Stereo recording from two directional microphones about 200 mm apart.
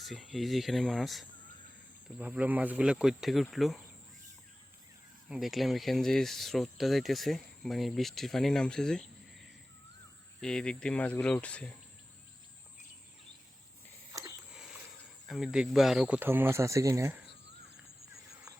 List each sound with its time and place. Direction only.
0.0 s speech: centre (ahead or behind)
5.3 s speech: centre (ahead or behind)
10.4 s speech: 5° left (ahead or behind)
14.1 s a sound: 15° right (ahead or behind)
15.3 s speech: centre (ahead or behind)